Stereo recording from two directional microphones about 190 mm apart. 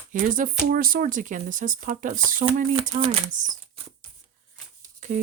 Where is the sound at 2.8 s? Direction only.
30° right (ahead or behind).